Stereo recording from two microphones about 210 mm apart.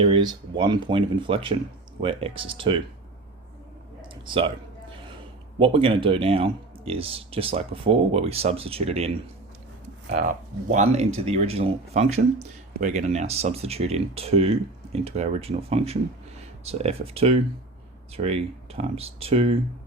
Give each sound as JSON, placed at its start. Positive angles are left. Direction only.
{"t": 0.0, "sound": "speech", "side_deg": -20}
{"t": 4.1, "sound": "speech", "side_deg": -25}
{"t": 5.5, "sound": "speech", "side_deg": -25}
{"t": 10.2, "sound": "speech", "side_deg": -35}